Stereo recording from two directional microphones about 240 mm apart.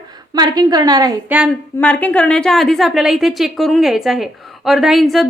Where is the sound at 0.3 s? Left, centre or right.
Centre.